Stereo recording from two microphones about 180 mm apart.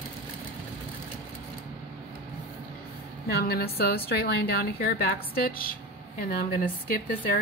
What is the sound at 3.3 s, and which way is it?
A woman's voice, 60° left (ahead or behind).